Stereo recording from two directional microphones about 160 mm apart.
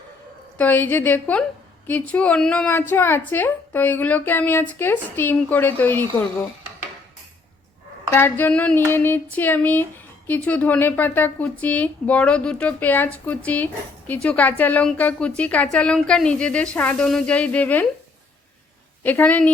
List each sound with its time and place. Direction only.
0.6 s a woman's voice: 10° left (ahead or behind)
8.1 s a woman's voice: 15° left (ahead or behind)
19.0 s a woman's voice: 10° left (ahead or behind)